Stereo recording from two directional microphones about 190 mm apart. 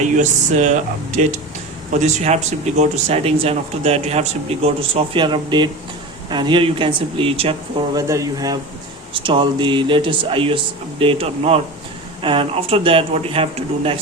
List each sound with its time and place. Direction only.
0.2 s speech: 40° right (ahead or behind)
7.9 s speech: 15° right (ahead or behind)